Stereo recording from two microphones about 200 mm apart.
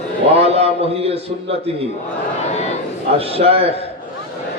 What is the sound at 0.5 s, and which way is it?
A man's voice, 30° right (ahead or behind).